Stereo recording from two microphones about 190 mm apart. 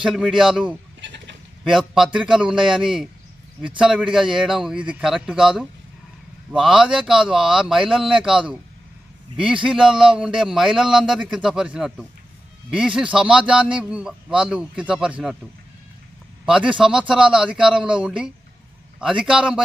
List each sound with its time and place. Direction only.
0.0 s a man's voice: centre (ahead or behind)
1.0 s goat: 70° right (ahead or behind)
1.6 s a man's voice: centre (ahead or behind)
9.6 s a man's voice: 5° right (ahead or behind)
16.5 s a man's voice: 5° right (ahead or behind)